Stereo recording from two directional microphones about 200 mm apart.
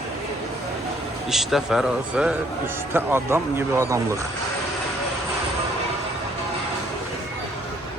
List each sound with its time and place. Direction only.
1.3 s speech: centre (ahead or behind)